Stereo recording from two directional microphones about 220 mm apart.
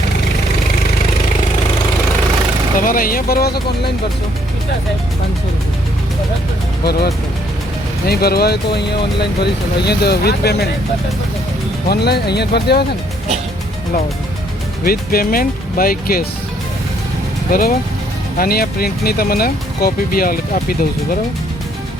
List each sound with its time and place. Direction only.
2.7 s speech: 40° left (ahead or behind)
8.0 s speech: 45° left (ahead or behind)
11.9 s speech: 50° left (ahead or behind)
14.8 s speech: 40° left (ahead or behind)
17.5 s speech: 40° left (ahead or behind)